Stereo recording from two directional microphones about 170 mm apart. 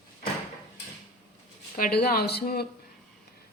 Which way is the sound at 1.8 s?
60° left (ahead or behind).